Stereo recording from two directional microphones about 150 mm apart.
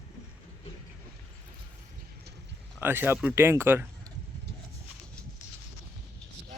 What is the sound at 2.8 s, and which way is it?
Speech, 15° right (ahead or behind).